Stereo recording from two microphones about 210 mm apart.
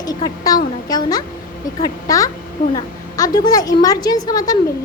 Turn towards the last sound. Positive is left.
turn(degrees=20)  # may be behind; listen again after turning